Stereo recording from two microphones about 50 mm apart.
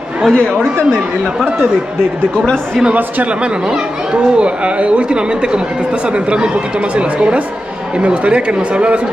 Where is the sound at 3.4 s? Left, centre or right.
Centre.